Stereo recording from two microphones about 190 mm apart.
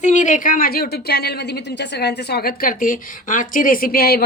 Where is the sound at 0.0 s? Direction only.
40° left (ahead or behind).